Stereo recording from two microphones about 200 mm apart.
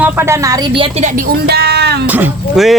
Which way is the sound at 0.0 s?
10° right (ahead or behind).